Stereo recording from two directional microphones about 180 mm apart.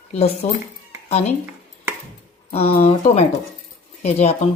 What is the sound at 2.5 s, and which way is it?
Speech, 35° left (ahead or behind).